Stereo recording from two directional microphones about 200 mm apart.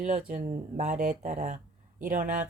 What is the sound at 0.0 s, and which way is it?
Speech, 35° right (ahead or behind).